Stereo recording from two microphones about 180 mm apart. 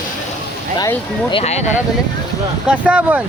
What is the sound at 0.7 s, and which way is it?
Speech, 25° left (ahead or behind).